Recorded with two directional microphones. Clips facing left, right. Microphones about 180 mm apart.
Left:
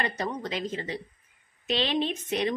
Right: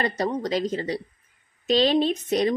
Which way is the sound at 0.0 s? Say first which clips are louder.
Right 6 dB; 35° right (ahead or behind).